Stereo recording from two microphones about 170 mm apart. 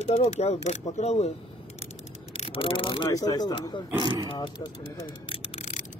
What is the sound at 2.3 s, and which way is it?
Speech, 35° left (ahead or behind).